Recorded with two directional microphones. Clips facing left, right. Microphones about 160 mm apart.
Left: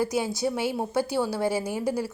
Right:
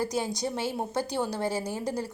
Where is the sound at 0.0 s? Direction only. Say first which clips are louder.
Left 4 dB; 10° left (ahead or behind).